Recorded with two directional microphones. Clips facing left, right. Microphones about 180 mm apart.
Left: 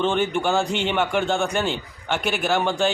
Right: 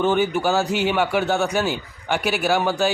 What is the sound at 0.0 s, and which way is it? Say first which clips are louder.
Speech: right 2 dB; 10° right (ahead or behind).